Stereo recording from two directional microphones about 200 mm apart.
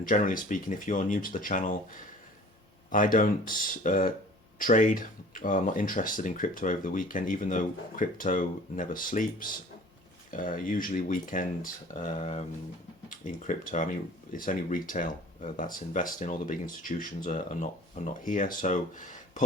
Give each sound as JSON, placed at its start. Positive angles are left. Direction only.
{"t": 0.0, "sound": "speech", "side_deg": 40}